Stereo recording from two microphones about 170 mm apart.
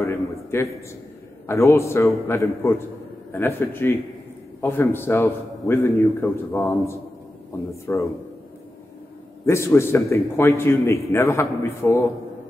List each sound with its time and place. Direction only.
0.0 s a sound: 15° left (ahead or behind)
1.5 s a man's voice: 15° left (ahead or behind)
7.8 s a man's voice: 15° left (ahead or behind)
9.5 s a man's voice: 15° left (ahead or behind)